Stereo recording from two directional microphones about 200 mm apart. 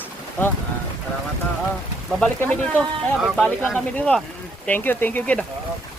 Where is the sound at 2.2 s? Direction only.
5° left (ahead or behind).